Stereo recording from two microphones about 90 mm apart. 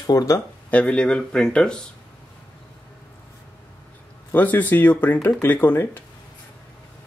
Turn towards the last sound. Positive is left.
turn(degrees=20)  # may be behind; listen again after turning